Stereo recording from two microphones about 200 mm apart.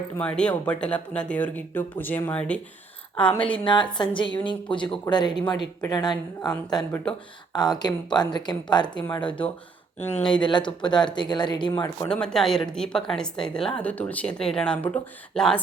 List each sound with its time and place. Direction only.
0.2 s speech: 5° left (ahead or behind)
3.6 s speech: 25° left (ahead or behind)
10.3 s speech: 25° left (ahead or behind)
12.0 s speech: 5° left (ahead or behind)